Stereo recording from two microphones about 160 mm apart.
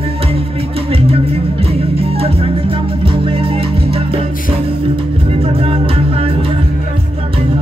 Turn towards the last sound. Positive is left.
turn(degrees=-35)  # may be behind; listen again after turning